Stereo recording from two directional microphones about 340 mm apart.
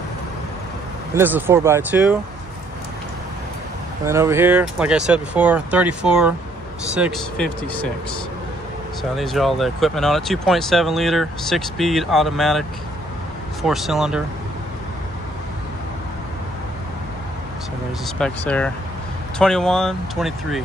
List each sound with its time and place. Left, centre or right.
1.1 s speech: centre
4.0 s speech: centre
9.1 s speech: centre
18.0 s speech: centre